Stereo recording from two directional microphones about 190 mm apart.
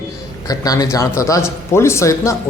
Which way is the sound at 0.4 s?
20° left (ahead or behind).